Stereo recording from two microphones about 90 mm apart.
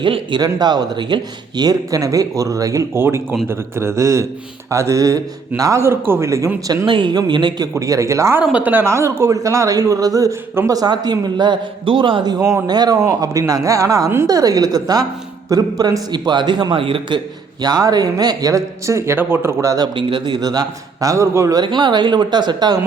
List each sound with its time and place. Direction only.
0.0 s a man's voice: 65° right (ahead or behind); by 6.5 s 35° right (ahead or behind)
6.8 s a man's voice: 65° right (ahead or behind)
7.7 s speech: 35° right (ahead or behind)
8.4 s speech: 20° right (ahead or behind)
8.8 s a man's voice: 30° right (ahead or behind); by 17.2 s 75° right (ahead or behind)
17.6 s speech: 45° right (ahead or behind); by 19.7 s 25° right (ahead or behind)
20.0 s a man's voice: 65° right (ahead or behind); by 21.6 s 35° right (ahead or behind)
21.6 s a man's voice: 55° right (ahead or behind)